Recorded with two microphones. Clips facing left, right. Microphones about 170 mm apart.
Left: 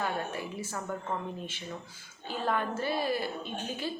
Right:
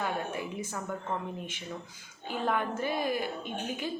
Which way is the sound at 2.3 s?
15° right (ahead or behind).